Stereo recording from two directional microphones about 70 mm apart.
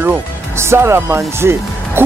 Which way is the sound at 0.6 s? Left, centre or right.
Right.